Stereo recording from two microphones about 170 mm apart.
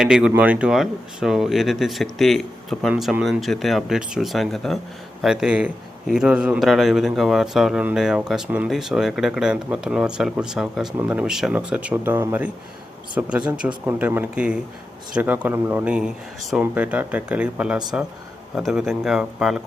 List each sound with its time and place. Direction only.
0.0 s a man's voice: 5° right (ahead or behind)